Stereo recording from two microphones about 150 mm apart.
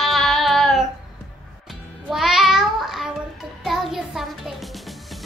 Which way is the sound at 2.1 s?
Centre (ahead or behind).